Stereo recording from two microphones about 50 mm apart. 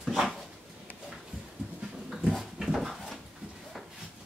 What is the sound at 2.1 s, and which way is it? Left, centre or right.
Dog, centre.